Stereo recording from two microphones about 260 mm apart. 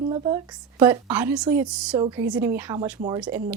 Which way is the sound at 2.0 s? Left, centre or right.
Centre.